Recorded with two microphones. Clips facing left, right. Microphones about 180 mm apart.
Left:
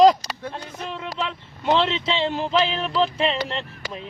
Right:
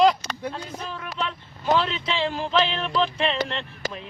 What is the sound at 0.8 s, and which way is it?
Speech, 25° left (ahead or behind).